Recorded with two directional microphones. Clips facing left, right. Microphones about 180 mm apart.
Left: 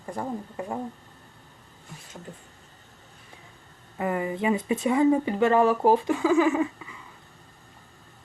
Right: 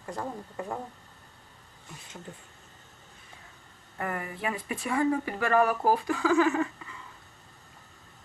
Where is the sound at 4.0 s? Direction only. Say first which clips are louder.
Left 7 dB; 20° left (ahead or behind).